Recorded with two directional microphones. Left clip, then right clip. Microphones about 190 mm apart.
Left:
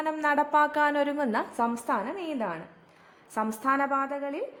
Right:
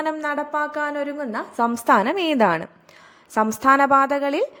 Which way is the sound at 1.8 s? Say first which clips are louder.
Right 12 dB; 35° right (ahead or behind).